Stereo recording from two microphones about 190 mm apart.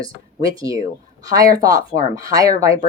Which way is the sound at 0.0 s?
20° right (ahead or behind).